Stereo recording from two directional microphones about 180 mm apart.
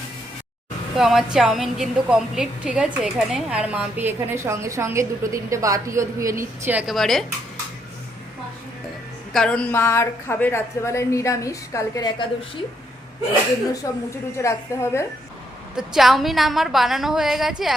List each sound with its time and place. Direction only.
0.9 s a woman's voice: 5° right (ahead or behind)
9.3 s a woman's voice: 5° left (ahead or behind)
13.8 s a woman's voice: 15° left (ahead or behind)
15.7 s a woman's voice: centre (ahead or behind)